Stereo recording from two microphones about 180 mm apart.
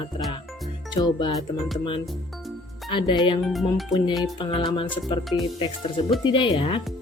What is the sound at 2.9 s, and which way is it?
Speech, 25° left (ahead or behind).